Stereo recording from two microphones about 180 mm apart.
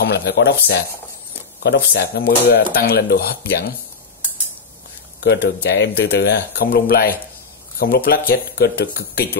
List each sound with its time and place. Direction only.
0.0 s speech: 70° left (ahead or behind)
5.2 s speech: 70° left (ahead or behind)